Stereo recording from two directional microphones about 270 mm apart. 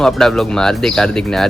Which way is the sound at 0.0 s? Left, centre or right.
Centre.